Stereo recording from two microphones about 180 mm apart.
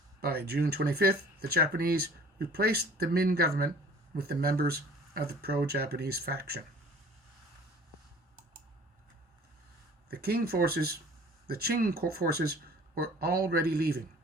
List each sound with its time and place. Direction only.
0.2 s speech: 60° right (ahead or behind)
10.1 s speech: 60° right (ahead or behind)